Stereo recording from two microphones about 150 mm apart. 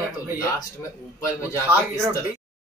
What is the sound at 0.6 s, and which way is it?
A man's voice, 20° left (ahead or behind).